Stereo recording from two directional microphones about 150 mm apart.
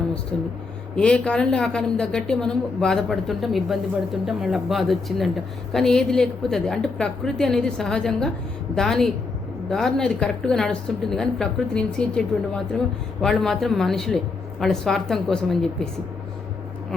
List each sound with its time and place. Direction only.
0.3 s a woman's voice: 5° left (ahead or behind)